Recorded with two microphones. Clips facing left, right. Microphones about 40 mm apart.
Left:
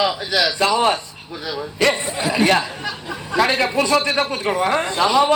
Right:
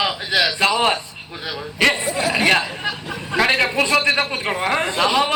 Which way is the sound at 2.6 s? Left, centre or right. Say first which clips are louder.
Right 1 dB; right.